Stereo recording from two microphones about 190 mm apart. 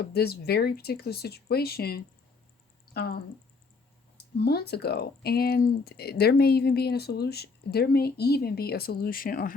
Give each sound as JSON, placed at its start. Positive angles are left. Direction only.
{"t": 0.0, "sound": "speech", "side_deg": 55}
{"t": 4.4, "sound": "speech", "side_deg": 55}